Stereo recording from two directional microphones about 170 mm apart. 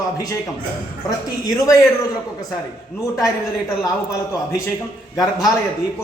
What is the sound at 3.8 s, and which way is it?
Speech, 20° left (ahead or behind).